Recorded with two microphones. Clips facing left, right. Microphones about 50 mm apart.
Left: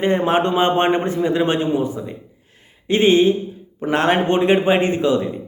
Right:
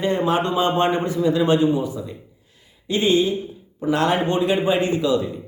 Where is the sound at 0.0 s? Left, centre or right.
Left.